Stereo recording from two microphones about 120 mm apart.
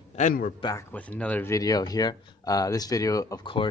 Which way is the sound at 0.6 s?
45° left (ahead or behind).